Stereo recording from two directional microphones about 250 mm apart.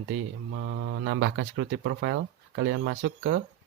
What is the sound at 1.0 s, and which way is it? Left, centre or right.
Speech, right.